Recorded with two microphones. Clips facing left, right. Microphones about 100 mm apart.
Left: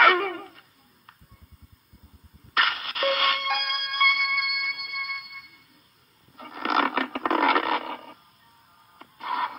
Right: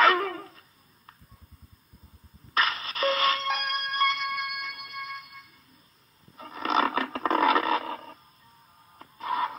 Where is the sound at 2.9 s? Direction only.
25° right (ahead or behind).